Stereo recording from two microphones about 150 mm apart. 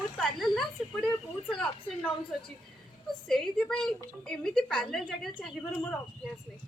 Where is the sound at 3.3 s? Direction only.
Centre (ahead or behind).